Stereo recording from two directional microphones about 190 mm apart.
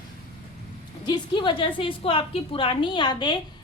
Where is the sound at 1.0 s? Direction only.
25° left (ahead or behind).